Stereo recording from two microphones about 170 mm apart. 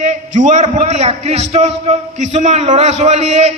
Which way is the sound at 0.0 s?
45° right (ahead or behind).